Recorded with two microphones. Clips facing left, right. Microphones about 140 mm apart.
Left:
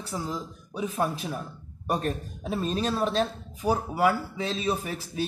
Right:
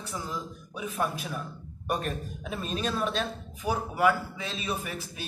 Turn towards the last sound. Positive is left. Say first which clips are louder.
# left 4 dB
turn(degrees=35)  # may be behind; listen again after turning